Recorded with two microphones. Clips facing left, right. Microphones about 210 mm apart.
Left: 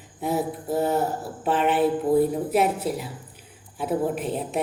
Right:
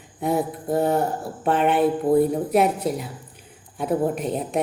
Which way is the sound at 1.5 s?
50° right (ahead or behind).